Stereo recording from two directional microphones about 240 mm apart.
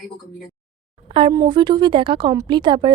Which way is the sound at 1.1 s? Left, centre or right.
Right.